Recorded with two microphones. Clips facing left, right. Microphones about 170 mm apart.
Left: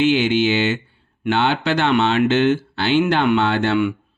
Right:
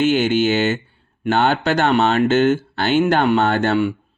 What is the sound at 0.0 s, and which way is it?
Speech, 45° right (ahead or behind).